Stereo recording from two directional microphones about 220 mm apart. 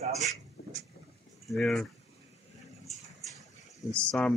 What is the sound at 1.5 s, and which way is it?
Speech, centre (ahead or behind).